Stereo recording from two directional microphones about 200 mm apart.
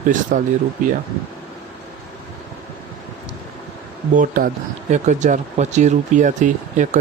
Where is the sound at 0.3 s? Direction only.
40° right (ahead or behind).